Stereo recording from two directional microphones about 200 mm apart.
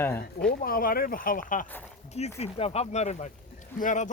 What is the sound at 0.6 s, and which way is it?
Speech, 45° left (ahead or behind).